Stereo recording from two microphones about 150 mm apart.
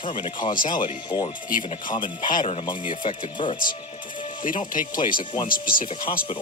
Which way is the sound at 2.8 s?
60° left (ahead or behind).